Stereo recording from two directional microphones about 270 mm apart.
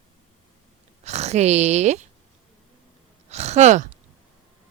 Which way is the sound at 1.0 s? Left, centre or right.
Right.